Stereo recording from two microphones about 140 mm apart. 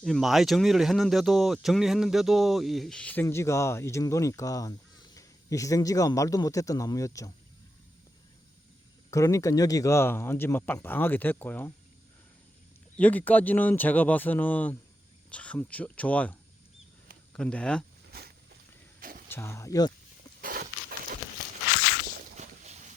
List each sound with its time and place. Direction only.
0.0 s speech: centre (ahead or behind); by 7.3 s 25° left (ahead or behind)
9.0 s speech: 20° left (ahead or behind)
13.0 s speech: 10° left (ahead or behind)
18.9 s a sound: 90° right
19.3 s speech: 20° left (ahead or behind)
20.4 s a sound: 90° right
22.4 s boat: 55° right (ahead or behind)